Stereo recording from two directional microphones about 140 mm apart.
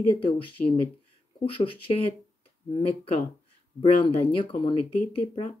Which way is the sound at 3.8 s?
40° left (ahead or behind).